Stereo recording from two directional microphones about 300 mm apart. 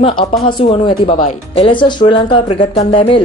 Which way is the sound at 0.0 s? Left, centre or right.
Centre.